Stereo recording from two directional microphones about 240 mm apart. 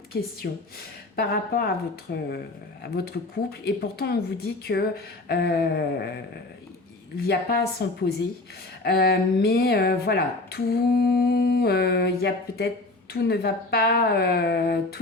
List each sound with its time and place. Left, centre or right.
0.4 s speech: left
7.3 s speech: left